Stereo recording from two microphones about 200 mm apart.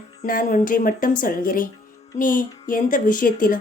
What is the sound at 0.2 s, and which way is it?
A woman's voice, 40° left (ahead or behind).